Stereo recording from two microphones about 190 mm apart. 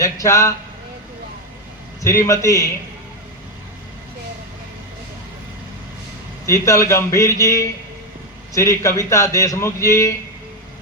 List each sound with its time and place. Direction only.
0.0 s a man's voice: 15° left (ahead or behind)
2.0 s a man's voice: 15° left (ahead or behind)
6.4 s a man's voice: 15° left (ahead or behind)